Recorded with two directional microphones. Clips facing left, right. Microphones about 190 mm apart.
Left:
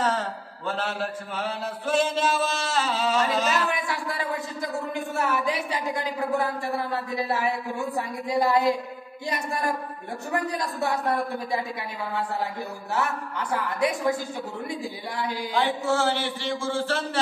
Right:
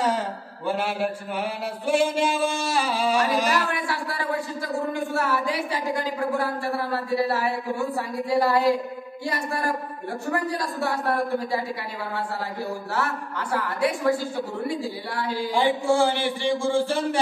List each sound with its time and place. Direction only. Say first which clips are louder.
0.7 s chant: right 4 dB; 10° right (ahead or behind)
3.7 s a man's voice: right 1 dB; 20° left (ahead or behind)
12.9 s a man's voice: left 3 dB; 20° left (ahead or behind)
15.5 s chant: right 3 dB; 15° right (ahead or behind)